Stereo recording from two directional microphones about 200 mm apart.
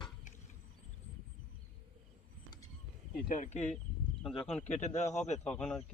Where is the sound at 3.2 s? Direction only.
40° left (ahead or behind).